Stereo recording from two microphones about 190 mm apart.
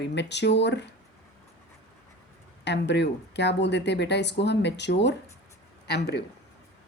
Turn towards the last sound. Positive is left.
turn(degrees=60)  # may be behind; listen again after turning